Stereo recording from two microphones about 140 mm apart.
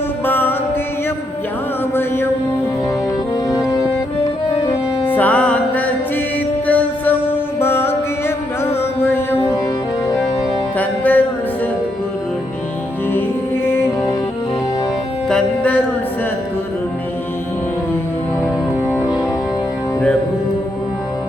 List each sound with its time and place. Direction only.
0.3 s music: 15° left (ahead or behind)
2.0 s music: 15° left (ahead or behind)
5.0 s music: 10° left (ahead or behind)
9.0 s music: 15° left (ahead or behind)
10.8 s music: 10° left (ahead or behind)
15.3 s music: 5° left (ahead or behind)